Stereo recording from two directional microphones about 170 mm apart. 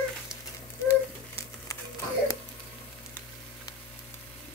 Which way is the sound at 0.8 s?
15° left (ahead or behind).